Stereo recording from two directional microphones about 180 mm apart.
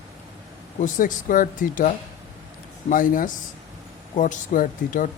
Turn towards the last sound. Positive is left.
turn(degrees=45)  # may be behind; listen again after turning